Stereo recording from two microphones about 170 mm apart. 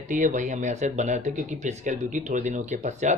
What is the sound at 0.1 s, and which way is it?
Speech, 50° right (ahead or behind).